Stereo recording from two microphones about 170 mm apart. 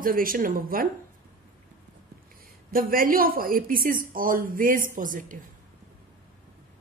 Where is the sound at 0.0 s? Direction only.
55° right (ahead or behind).